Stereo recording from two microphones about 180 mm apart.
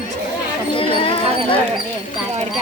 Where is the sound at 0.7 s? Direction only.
30° left (ahead or behind).